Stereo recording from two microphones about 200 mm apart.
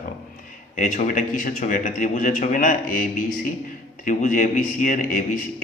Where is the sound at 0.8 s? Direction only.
40° left (ahead or behind).